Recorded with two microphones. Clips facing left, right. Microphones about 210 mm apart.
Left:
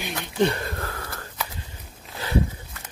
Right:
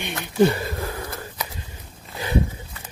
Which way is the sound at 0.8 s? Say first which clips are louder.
Right 4 dB; 15° right (ahead or behind).